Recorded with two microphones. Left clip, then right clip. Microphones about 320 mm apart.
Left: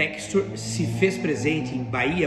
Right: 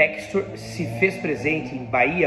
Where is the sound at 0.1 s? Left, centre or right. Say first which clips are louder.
Even; centre.